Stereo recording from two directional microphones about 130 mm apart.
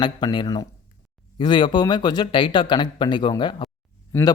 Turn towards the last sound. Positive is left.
turn(degrees=20)  # may be behind; listen again after turning